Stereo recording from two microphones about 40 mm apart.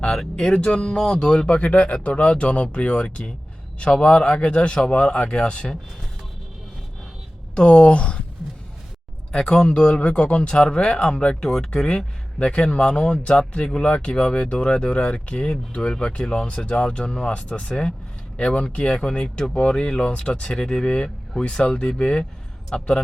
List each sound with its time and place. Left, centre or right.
0.0 s speech: left
7.5 s speech: left
9.3 s speech: centre